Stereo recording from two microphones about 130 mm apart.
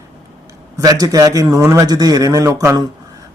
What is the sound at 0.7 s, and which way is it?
Speech, 30° right (ahead or behind).